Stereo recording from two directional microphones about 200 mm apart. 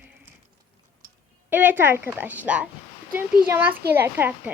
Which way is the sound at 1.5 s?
10° right (ahead or behind).